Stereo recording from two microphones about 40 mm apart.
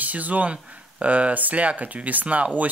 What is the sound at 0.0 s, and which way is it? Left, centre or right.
Speech, right.